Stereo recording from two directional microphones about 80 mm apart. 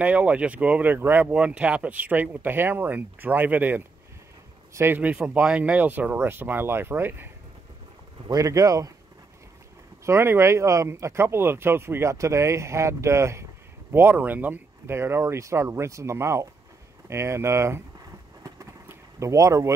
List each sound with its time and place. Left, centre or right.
0.0 s speech: centre
1.3 s speech: centre; by 5.0 s right
5.0 s speech: centre
8.3 s speech: right
10.0 s speech: right
13.9 s speech: right
18.9 s a sound: right